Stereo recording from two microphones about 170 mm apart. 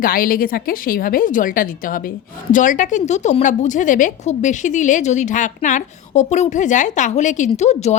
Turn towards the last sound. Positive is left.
turn(degrees=40)  # may be behind; listen again after turning